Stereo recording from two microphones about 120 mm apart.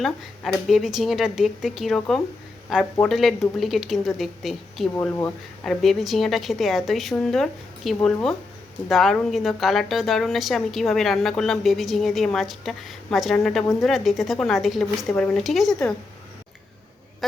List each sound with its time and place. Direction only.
0.0 s a woman's voice: centre (ahead or behind)
4.9 s speech: 15° left (ahead or behind)
5.6 s a woman's voice: centre (ahead or behind)